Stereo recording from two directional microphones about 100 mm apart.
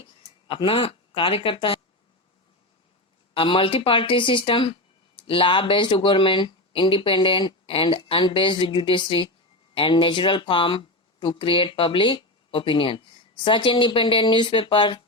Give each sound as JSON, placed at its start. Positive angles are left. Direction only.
{"t": 0.4, "sound": "speech", "side_deg": 60}
{"t": 3.3, "sound": "speech", "side_deg": 60}